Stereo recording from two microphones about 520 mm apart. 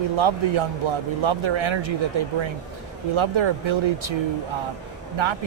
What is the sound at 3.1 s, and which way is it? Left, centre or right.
Speech, right.